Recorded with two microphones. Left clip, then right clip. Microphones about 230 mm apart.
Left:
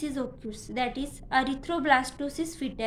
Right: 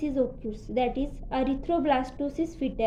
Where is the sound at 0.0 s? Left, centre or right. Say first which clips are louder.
Right 6 dB; centre.